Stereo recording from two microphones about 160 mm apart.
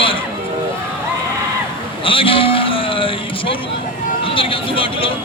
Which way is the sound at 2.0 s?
35° left (ahead or behind).